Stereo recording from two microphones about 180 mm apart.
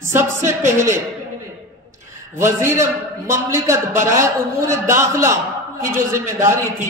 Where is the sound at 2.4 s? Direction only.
15° right (ahead or behind).